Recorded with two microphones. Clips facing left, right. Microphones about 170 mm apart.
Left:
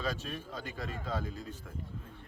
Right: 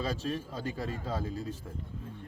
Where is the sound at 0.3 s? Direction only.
35° right (ahead or behind).